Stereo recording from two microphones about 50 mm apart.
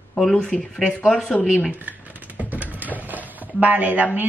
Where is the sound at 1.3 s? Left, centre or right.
Centre.